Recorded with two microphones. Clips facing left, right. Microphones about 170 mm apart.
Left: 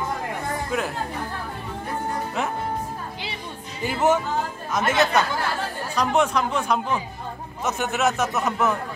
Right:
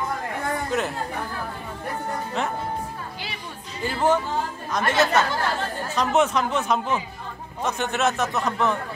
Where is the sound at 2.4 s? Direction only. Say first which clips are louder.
Even; 5° left (ahead or behind).